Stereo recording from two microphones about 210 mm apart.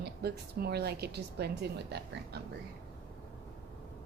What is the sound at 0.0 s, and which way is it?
A woman's voice, 50° right (ahead or behind).